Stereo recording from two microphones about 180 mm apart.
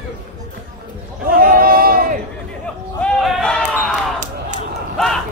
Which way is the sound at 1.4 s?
55° right (ahead or behind).